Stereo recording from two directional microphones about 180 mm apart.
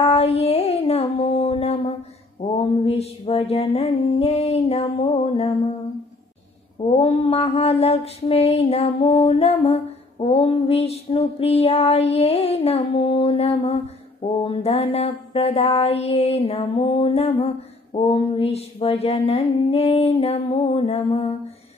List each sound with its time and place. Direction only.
0.0 s a sound: 35° left (ahead or behind)
2.6 s mantra: 30° left (ahead or behind)
6.9 s mantra: 35° left (ahead or behind)